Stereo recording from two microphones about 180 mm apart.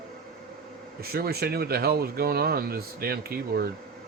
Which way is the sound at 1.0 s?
60° right (ahead or behind).